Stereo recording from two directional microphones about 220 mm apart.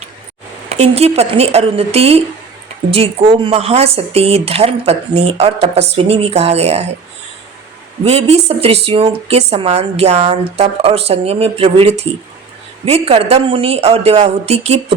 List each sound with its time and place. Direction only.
0.7 s speech: 30° right (ahead or behind)
8.0 s speech: 30° right (ahead or behind)